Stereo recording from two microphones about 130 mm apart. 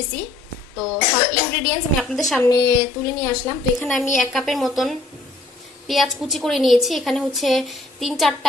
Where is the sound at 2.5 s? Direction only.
30° left (ahead or behind).